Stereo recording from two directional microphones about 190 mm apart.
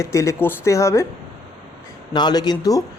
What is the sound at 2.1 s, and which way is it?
Speech, 20° left (ahead or behind).